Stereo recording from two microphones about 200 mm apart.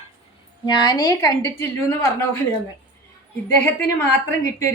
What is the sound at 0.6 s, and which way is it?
A woman's voice, 20° left (ahead or behind).